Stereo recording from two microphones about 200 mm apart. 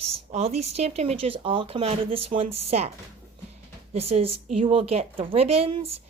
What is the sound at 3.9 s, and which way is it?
Speech, 30° right (ahead or behind).